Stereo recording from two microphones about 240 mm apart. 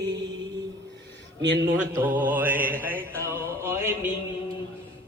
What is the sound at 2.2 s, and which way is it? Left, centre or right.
Music, centre.